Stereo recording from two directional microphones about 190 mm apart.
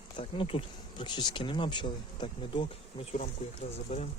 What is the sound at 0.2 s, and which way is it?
Speech, 30° left (ahead or behind).